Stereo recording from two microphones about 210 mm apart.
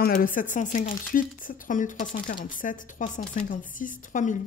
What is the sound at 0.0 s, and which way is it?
A woman's voice, 40° left (ahead or behind).